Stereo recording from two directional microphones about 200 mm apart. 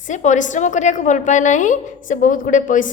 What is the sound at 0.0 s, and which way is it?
A woman's voice, 40° left (ahead or behind).